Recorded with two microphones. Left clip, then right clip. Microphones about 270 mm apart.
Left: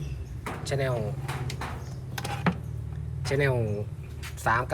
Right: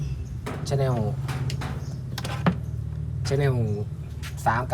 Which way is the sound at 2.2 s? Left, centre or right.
Centre.